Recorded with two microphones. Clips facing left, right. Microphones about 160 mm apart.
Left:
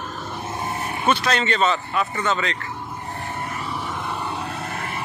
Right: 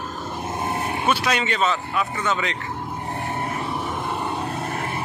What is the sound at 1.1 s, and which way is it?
A man's voice, 10° right (ahead or behind).